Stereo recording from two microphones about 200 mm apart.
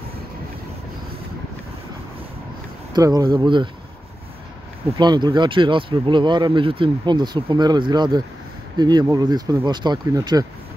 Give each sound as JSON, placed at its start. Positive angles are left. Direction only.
{"t": 2.9, "sound": "speech", "side_deg": -15}
{"t": 4.9, "sound": "speech", "side_deg": -20}